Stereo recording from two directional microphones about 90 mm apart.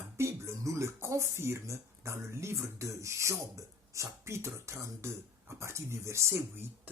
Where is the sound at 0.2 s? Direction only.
30° right (ahead or behind).